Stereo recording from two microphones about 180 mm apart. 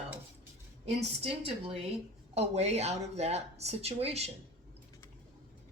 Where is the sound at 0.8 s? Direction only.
35° right (ahead or behind).